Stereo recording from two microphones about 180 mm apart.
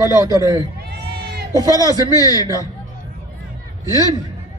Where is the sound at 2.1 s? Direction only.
20° left (ahead or behind).